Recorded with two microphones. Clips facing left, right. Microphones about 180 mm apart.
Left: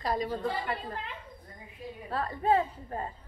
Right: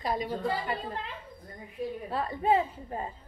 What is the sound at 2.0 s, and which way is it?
A woman's voice, 20° right (ahead or behind).